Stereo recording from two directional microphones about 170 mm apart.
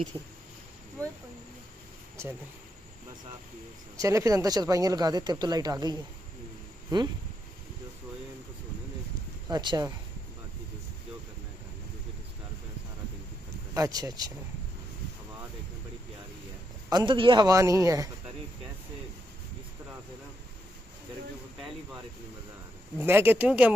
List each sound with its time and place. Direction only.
3.9 s speech: 20° right (ahead or behind)
9.5 s speech: 25° right (ahead or behind)
13.7 s speech: 20° right (ahead or behind)
16.9 s speech: 30° right (ahead or behind)
22.9 s speech: 10° right (ahead or behind)